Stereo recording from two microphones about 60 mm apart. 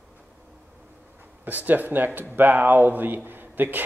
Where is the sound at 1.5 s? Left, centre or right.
Right.